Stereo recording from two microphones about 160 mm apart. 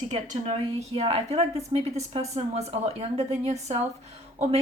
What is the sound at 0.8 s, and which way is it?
Speech, 40° right (ahead or behind).